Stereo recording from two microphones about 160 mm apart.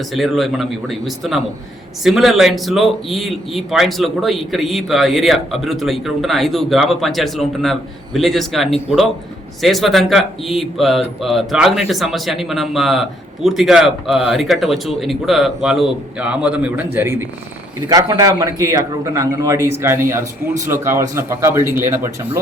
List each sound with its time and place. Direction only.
0.1 s a man's voice: centre (ahead or behind)